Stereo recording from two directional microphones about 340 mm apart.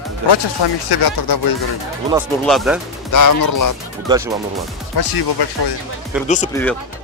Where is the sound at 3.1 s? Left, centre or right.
Left.